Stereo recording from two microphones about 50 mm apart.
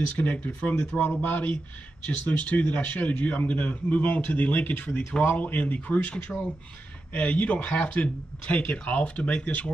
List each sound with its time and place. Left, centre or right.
0.2 s a man's voice: left